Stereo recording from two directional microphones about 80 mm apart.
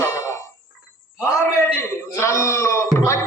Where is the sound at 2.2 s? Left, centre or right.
Left.